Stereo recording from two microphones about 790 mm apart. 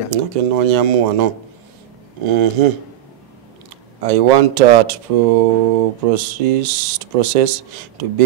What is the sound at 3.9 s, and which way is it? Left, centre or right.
Speech, right.